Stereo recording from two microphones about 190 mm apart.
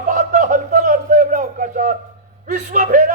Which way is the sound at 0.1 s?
40° right (ahead or behind).